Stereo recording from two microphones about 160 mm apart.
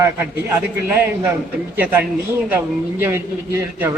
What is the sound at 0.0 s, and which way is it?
A man's voice, 15° right (ahead or behind).